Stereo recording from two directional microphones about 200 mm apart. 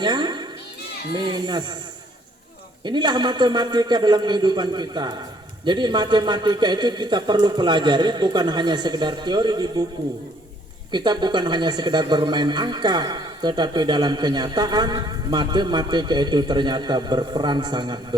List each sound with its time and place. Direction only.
0.0 s children playing: 20° right (ahead or behind)
1.1 s speech: 20° right (ahead or behind)
2.8 s speech: 20° right (ahead or behind)
10.9 s speech: 20° right (ahead or behind)